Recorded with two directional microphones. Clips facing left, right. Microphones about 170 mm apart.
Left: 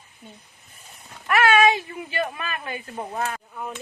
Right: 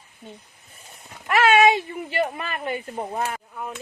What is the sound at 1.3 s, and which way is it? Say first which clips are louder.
Speech: right 1 dB; 25° right (ahead or behind).